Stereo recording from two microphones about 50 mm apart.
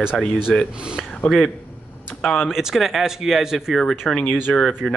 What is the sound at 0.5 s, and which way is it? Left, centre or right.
Speech, left.